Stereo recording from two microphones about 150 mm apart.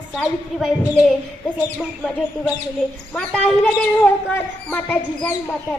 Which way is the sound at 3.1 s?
5° left (ahead or behind).